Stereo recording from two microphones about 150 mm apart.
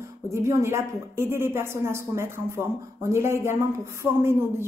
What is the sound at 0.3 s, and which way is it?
A woman's voice, 20° right (ahead or behind).